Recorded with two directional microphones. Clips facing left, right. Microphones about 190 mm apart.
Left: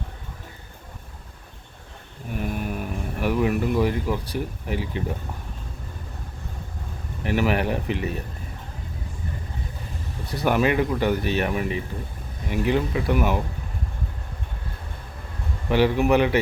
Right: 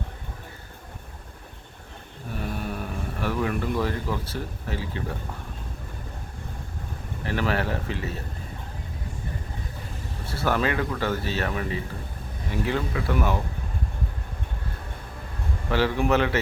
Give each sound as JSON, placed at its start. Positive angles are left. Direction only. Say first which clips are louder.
{"t": 2.4, "sound": "speech", "louder": "left 3 dB", "side_deg": 10}
{"t": 7.3, "sound": "speech", "louder": "left 4 dB", "side_deg": 15}
{"t": 10.2, "sound": "speech", "louder": "left 4 dB", "side_deg": 15}
{"t": 15.7, "sound": "speech", "louder": "left 4 dB", "side_deg": 15}